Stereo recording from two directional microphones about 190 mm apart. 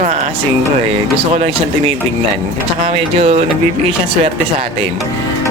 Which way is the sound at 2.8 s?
30° right (ahead or behind).